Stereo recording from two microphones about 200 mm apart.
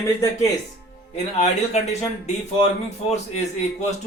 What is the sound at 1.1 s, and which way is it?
Speech, 35° left (ahead or behind).